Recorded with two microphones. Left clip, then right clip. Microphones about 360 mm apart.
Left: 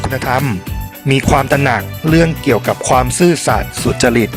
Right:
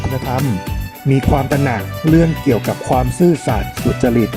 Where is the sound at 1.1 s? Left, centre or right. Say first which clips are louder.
Left 4 dB; left.